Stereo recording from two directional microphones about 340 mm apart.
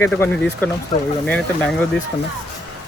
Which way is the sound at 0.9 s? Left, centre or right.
Centre.